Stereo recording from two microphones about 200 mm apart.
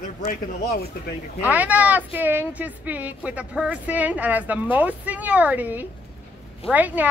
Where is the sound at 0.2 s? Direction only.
45° left (ahead or behind).